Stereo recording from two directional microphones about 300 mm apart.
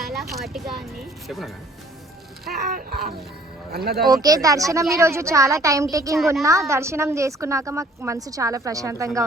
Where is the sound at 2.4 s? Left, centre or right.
Right.